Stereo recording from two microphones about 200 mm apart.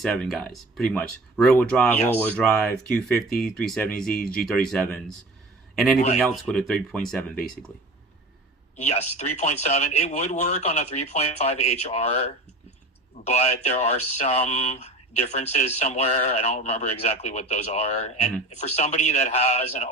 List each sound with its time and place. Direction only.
0.0 s speech: centre (ahead or behind)
8.7 s speech: 35° left (ahead or behind)